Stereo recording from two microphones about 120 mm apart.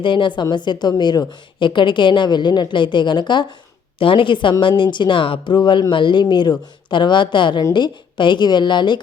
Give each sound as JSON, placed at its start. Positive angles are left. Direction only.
{"t": 0.0, "sound": "speech", "side_deg": 40}